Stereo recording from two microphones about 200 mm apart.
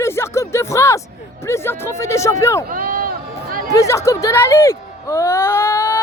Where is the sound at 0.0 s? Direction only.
15° left (ahead or behind).